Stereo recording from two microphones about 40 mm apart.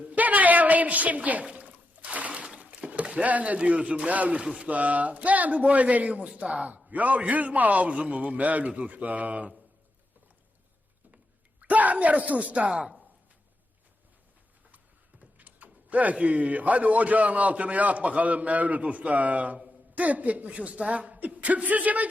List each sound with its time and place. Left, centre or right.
0.0 s a sound: right
1.5 s water: right
2.8 s a man's voice: right
11.6 s a man's voice: right
15.2 s a man's voice: right